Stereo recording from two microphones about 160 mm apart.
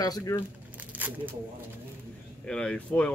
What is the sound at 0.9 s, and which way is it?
Speech, 10° right (ahead or behind).